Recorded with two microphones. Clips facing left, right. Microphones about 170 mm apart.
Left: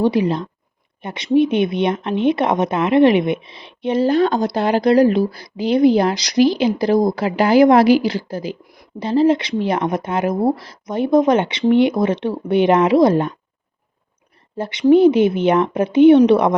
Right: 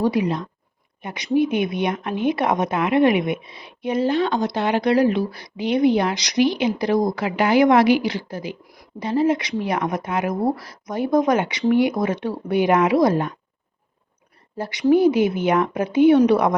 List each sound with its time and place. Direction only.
0.0 s speech: 30° left (ahead or behind)
14.6 s speech: 25° left (ahead or behind)